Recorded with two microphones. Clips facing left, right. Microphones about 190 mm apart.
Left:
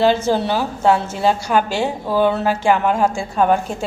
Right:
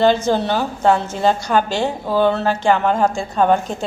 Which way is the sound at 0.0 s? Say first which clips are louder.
Right 1 dB; 5° left (ahead or behind).